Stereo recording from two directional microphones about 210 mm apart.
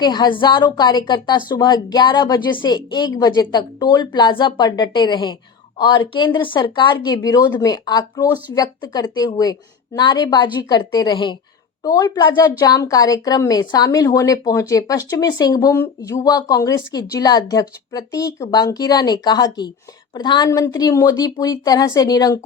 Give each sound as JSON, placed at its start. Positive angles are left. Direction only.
{"t": 0.0, "sound": "a woman's voice", "side_deg": 20}